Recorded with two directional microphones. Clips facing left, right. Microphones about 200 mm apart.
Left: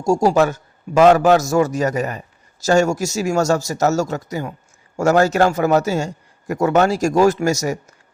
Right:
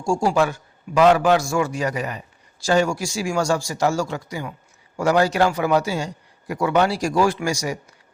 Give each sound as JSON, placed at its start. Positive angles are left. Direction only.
{"t": 0.0, "sound": "a man's voice", "side_deg": 40}